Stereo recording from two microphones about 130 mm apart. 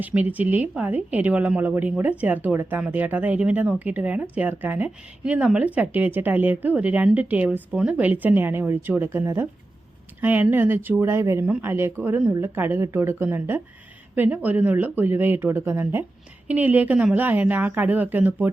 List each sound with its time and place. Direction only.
0.0 s speech: 10° right (ahead or behind)